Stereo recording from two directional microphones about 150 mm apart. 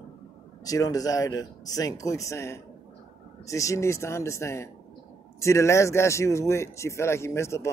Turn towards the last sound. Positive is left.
turn(degrees=20)  # may be behind; listen again after turning